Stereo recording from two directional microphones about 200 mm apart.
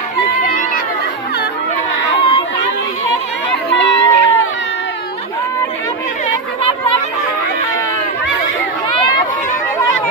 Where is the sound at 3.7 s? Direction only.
60° left (ahead or behind).